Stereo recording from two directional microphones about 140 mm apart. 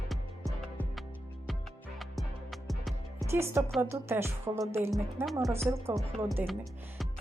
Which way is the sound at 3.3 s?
20° right (ahead or behind).